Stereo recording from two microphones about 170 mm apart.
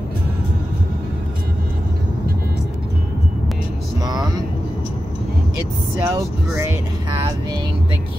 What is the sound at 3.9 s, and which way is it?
Vehicle, 25° right (ahead or behind).